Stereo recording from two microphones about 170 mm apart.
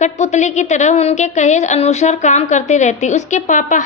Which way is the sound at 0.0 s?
45° left (ahead or behind).